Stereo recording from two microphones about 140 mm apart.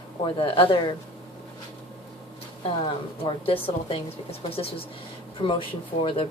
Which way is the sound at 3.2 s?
40° left (ahead or behind).